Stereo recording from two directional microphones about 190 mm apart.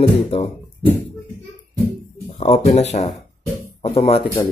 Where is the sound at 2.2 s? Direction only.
35° left (ahead or behind).